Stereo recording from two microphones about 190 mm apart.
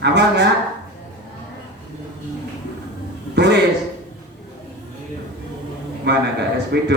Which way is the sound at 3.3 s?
60° right (ahead or behind).